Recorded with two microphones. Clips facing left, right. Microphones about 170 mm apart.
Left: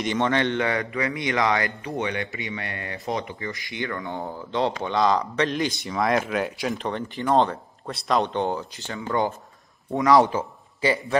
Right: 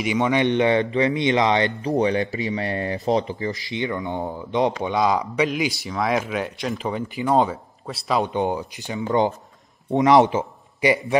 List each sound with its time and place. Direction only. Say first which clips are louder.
0.0 s a man's voice: right 3 dB; 10° right (ahead or behind); by 1.9 s 25° right (ahead or behind)
1.9 s a man's voice: right 8 dB; 35° right (ahead or behind); by 11.0 s 20° right (ahead or behind)